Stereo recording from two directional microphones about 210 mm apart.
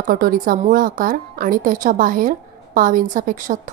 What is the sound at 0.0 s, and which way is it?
A woman's voice, 40° right (ahead or behind).